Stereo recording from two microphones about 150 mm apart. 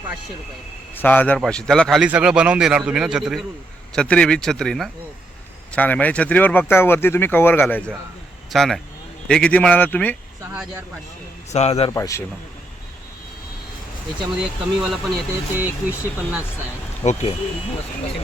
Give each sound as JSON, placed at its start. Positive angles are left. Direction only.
{"t": 1.0, "sound": "a man's voice", "side_deg": 10}
{"t": 3.9, "sound": "a man's voice", "side_deg": 5}
{"t": 11.5, "sound": "speech", "side_deg": 45}
{"t": 11.9, "sound": "a man's voice", "side_deg": 20}
{"t": 14.3, "sound": "a man's voice", "side_deg": -5}
{"t": 17.0, "sound": "speech", "side_deg": 45}